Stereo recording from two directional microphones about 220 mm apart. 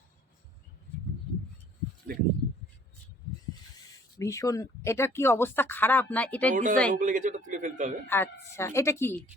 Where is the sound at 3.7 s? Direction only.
15° left (ahead or behind).